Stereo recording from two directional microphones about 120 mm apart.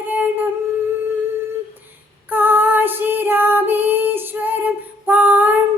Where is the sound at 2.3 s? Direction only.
15° right (ahead or behind).